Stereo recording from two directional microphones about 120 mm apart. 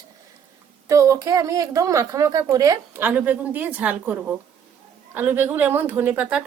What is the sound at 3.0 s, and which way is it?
A woman's voice, 15° right (ahead or behind).